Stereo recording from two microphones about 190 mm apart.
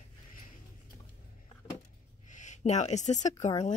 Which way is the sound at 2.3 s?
40° left (ahead or behind).